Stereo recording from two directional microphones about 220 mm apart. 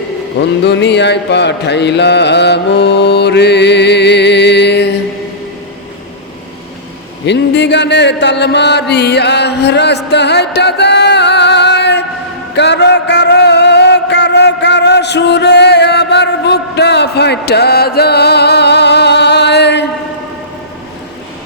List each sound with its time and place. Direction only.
0.6 s mantra: 50° left (ahead or behind)
7.3 s chant: 50° left (ahead or behind)
12.5 s a sound: 50° left (ahead or behind)